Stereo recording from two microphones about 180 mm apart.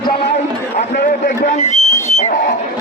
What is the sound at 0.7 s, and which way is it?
A man's voice, 45° left (ahead or behind).